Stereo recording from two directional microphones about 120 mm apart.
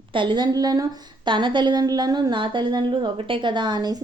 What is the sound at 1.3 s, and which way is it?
A woman's voice, 40° right (ahead or behind).